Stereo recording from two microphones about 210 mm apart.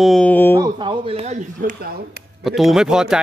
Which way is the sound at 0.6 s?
20° right (ahead or behind).